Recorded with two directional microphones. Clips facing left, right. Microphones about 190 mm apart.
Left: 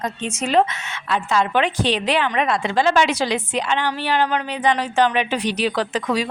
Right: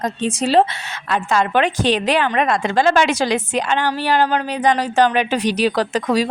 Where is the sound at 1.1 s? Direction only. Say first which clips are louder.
Right 2 dB; 45° right (ahead or behind).